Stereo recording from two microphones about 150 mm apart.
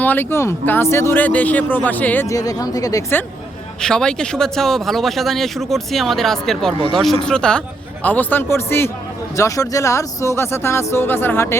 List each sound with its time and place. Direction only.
0.0 s speech: 15° left (ahead or behind)
2.2 s speech: 25° left (ahead or behind)
3.8 s speech: 5° left (ahead or behind)